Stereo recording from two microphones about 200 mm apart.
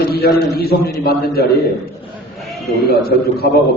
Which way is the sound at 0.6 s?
50° left (ahead or behind).